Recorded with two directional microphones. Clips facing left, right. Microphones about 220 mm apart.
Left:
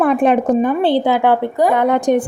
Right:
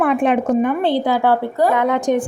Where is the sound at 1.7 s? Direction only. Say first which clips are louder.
Left 3 dB; 35° left (ahead or behind).